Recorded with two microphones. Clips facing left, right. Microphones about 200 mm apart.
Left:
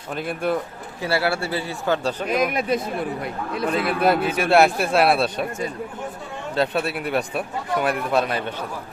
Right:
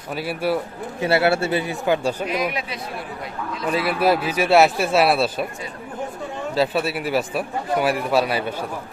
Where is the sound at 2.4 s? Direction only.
50° left (ahead or behind).